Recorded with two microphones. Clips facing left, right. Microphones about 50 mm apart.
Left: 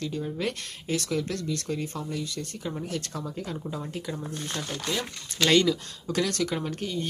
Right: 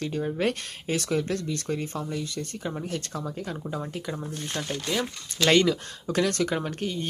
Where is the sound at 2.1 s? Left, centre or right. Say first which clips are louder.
Right 1 dB; centre.